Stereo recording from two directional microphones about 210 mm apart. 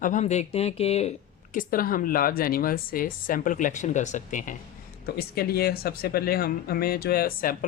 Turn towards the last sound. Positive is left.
turn(degrees=40)  # may be behind; listen again after turning